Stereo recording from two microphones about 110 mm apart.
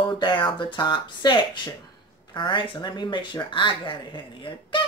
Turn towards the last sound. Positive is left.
turn(degrees=50)  # may be behind; listen again after turning